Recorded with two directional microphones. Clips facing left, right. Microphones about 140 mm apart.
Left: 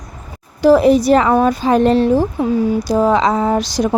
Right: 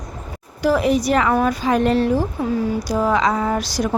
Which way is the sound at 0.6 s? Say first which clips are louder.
Left 7 dB; 30° left (ahead or behind).